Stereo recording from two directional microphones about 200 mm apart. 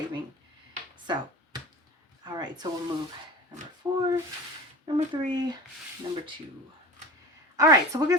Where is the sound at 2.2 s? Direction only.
20° right (ahead or behind).